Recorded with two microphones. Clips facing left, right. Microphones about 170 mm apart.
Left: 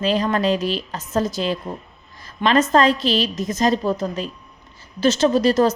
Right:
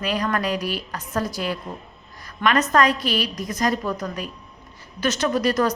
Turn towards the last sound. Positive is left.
turn(degrees=25)  # may be behind; listen again after turning